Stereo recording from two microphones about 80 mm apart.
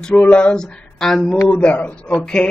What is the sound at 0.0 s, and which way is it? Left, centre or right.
Speech, centre.